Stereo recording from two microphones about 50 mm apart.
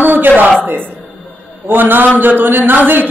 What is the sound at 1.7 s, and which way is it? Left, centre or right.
Speech, right.